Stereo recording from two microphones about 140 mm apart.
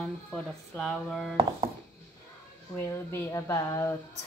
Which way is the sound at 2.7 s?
20° left (ahead or behind).